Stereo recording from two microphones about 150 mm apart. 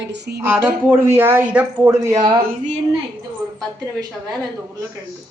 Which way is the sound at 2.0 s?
20° right (ahead or behind).